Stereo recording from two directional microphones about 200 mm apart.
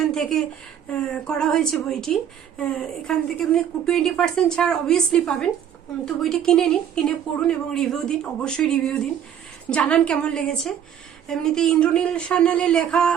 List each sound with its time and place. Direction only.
0.0 s a woman's voice: centre (ahead or behind)